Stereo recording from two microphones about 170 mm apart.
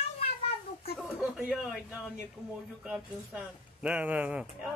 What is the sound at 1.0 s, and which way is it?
Speech, 5° right (ahead or behind).